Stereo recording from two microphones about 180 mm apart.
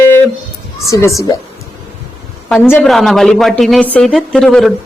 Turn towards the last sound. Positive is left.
turn(degrees=5)  # may be behind; listen again after turning